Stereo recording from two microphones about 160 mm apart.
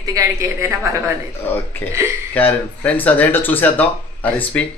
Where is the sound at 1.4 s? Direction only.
15° left (ahead or behind).